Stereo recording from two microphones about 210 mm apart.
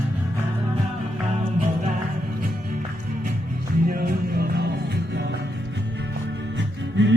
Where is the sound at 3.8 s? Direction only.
45° right (ahead or behind).